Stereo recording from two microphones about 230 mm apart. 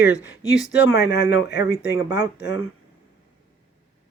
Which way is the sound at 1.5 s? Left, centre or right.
Centre.